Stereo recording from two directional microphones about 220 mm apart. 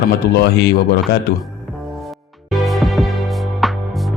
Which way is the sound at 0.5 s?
50° left (ahead or behind).